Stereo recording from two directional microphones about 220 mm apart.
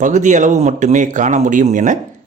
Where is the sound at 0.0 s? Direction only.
35° right (ahead or behind).